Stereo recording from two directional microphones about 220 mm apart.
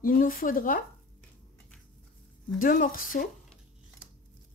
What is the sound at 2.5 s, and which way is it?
Speech, 40° left (ahead or behind).